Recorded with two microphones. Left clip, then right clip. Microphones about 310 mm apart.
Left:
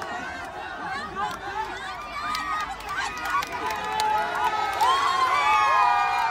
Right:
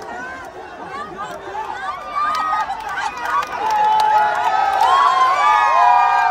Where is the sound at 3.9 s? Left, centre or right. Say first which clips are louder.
Right 10 dB; right.